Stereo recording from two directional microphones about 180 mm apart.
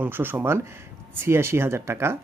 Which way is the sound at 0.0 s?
10° right (ahead or behind).